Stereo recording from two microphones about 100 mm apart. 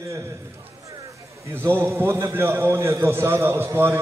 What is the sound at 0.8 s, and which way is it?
A man's voice, 30° right (ahead or behind).